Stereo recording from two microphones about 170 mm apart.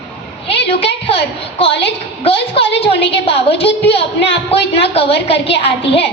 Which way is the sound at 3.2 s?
35° left (ahead or behind).